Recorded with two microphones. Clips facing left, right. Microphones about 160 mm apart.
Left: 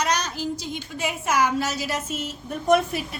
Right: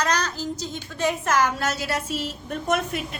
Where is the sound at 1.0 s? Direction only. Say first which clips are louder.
Right 2 dB; 10° left (ahead or behind).